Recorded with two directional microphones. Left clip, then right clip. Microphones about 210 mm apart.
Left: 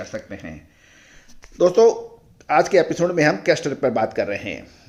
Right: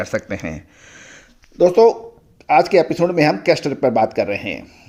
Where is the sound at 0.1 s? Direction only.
50° right (ahead or behind).